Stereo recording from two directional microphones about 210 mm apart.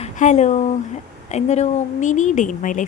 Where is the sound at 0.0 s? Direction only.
35° left (ahead or behind).